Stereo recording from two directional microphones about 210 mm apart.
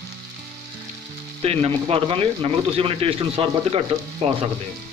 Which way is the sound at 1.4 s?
25° right (ahead or behind).